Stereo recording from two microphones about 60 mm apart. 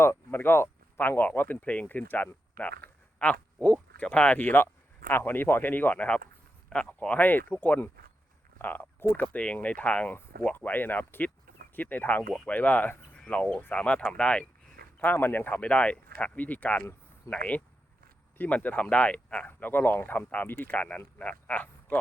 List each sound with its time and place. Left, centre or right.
0.0 s speech: left; by 7.2 s centre
7.2 s speech: left
14.9 s speech: left
15.6 s speech: left
19.5 s speech: left
20.8 s speech: left